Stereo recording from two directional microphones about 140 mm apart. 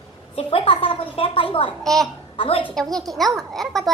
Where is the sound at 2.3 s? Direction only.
45° left (ahead or behind).